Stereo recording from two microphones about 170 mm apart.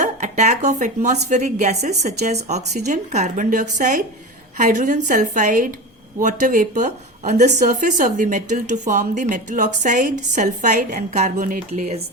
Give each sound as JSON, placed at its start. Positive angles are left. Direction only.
{"t": 0.0, "sound": "a woman's voice", "side_deg": -45}